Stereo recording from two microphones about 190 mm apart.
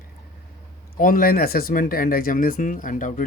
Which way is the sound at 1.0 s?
50° left (ahead or behind).